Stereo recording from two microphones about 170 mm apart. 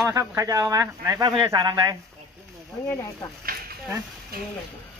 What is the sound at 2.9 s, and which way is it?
Speech, 15° left (ahead or behind).